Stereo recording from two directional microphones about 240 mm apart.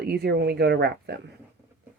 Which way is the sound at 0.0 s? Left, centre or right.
Right.